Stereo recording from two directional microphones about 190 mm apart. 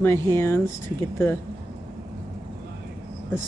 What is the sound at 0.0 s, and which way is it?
Speech, 15° left (ahead or behind).